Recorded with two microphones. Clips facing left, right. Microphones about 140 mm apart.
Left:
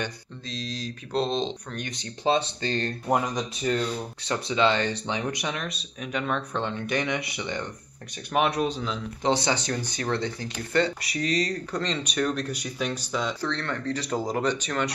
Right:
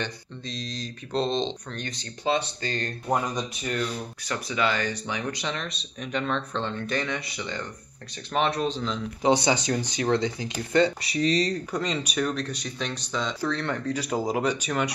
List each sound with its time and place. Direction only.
0.0 s speech: 5° left (ahead or behind)
1.9 s speech: 25° left (ahead or behind)
5.5 s speech: 5° left (ahead or behind); by 7.6 s 20° left (ahead or behind)
8.3 s speech: centre (ahead or behind)
9.3 s speech: 15° right (ahead or behind)
11.7 s speech: 5° right (ahead or behind)
13.6 s speech: 15° right (ahead or behind)